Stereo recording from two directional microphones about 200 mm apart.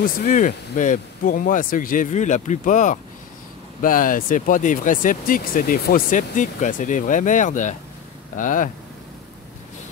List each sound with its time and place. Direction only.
0.0 s speech: 40° left (ahead or behind)